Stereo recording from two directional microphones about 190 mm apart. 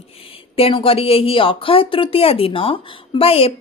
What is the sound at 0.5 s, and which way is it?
Speech, 30° left (ahead or behind).